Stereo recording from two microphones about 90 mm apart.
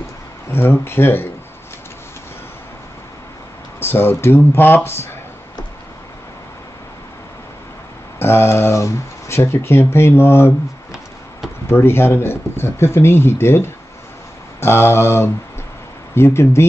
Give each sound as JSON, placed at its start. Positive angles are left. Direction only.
{"t": 0.5, "sound": "speech", "side_deg": 25}
{"t": 3.8, "sound": "speech", "side_deg": 25}
{"t": 8.2, "sound": "speech", "side_deg": 25}
{"t": 11.7, "sound": "speech", "side_deg": 25}